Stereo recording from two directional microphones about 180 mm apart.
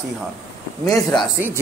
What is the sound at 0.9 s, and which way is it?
Speech, 20° left (ahead or behind).